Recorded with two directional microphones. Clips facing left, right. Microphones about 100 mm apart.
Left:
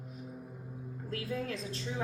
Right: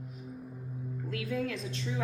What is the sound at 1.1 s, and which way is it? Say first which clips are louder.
Speech: right 2 dB; 35° left (ahead or behind).